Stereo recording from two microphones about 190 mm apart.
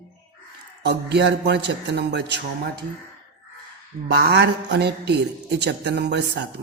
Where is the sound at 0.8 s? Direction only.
60° right (ahead or behind).